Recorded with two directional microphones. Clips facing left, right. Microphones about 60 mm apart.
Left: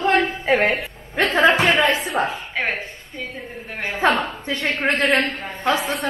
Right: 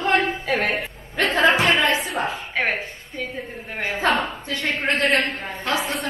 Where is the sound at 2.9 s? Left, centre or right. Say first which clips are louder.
Right 1 dB; centre.